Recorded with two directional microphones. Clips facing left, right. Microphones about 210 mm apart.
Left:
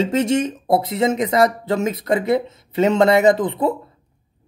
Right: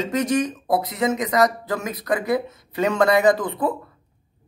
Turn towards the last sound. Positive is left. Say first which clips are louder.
# left 3 dB
turn(degrees=25)  # may be behind; listen again after turning